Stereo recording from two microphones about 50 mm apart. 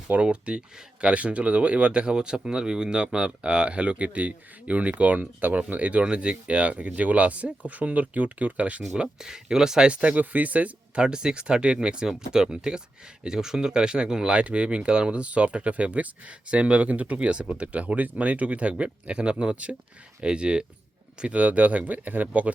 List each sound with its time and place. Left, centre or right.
0.1 s speech: right
9.0 s speech: centre
9.9 s speech: right